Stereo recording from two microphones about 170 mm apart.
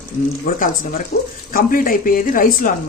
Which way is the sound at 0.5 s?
60° left (ahead or behind).